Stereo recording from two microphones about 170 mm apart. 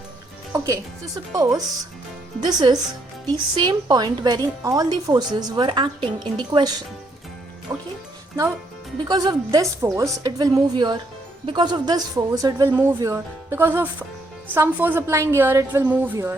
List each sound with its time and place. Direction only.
0.5 s speech: 20° right (ahead or behind)
9.0 s a woman's voice: 25° right (ahead or behind)